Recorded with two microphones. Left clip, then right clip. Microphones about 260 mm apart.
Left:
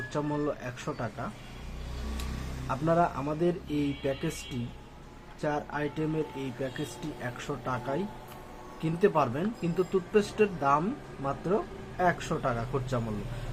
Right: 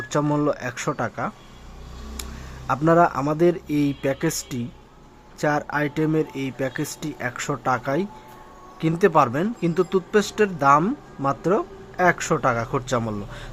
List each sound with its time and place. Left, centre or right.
0.1 s speech: right
2.6 s speech: right
5.4 s speech: right